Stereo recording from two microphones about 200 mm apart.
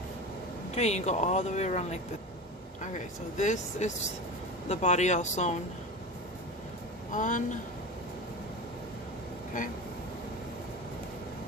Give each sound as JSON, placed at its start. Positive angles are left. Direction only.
{"t": 0.8, "sound": "speech", "side_deg": 35}
{"t": 7.1, "sound": "speech", "side_deg": 40}